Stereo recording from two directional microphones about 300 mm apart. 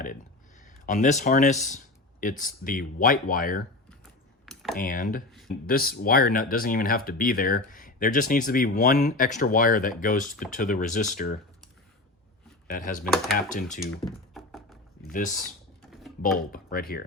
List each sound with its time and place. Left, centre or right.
0.6 s speech: left
4.4 s computer keyboard: centre
4.8 s speech: left
5.3 s speech: centre
5.6 s speech: left
12.7 s speech: left
14.3 s a sound: centre
15.1 s speech: left
15.8 s typing: centre
16.5 s speech: left